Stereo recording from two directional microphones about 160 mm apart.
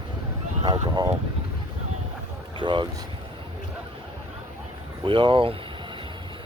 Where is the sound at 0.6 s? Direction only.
25° right (ahead or behind).